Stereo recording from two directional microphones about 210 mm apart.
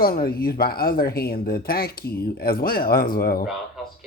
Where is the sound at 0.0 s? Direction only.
45° left (ahead or behind).